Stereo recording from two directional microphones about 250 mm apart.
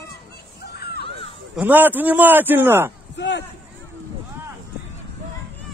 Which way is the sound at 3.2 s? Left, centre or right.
Left.